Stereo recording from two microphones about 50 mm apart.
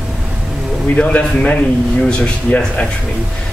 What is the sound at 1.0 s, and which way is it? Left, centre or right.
Speech, left.